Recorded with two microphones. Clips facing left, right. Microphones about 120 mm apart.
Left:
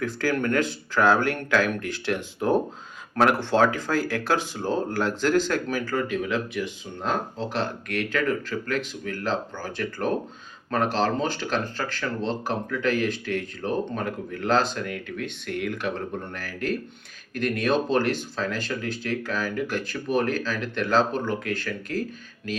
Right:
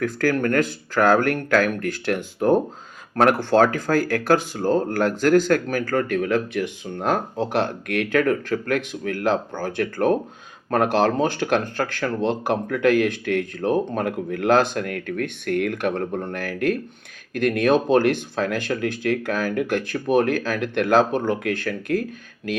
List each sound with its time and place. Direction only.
0.0 s speech: 45° right (ahead or behind)